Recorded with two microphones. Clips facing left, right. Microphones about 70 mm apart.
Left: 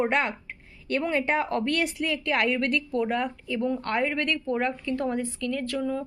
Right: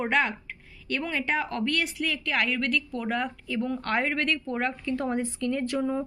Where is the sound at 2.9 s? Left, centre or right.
Centre.